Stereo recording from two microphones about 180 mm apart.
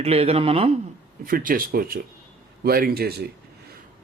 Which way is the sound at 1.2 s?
50° right (ahead or behind).